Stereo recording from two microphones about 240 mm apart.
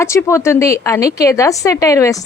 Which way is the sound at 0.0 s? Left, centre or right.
Centre.